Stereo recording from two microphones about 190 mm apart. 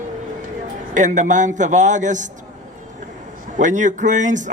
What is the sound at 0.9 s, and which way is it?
Speech, 40° right (ahead or behind).